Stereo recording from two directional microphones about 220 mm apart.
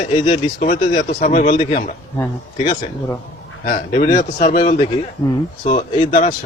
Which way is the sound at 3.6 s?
35° left (ahead or behind).